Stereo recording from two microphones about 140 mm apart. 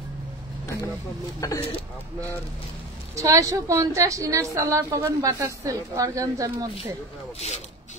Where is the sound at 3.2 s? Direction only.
25° right (ahead or behind).